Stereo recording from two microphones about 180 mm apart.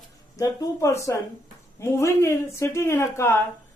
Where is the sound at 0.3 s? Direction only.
20° left (ahead or behind).